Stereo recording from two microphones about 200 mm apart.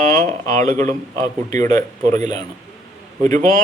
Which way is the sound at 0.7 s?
35° right (ahead or behind).